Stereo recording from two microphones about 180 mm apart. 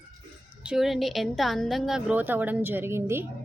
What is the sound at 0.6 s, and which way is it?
A woman's voice, 5° right (ahead or behind).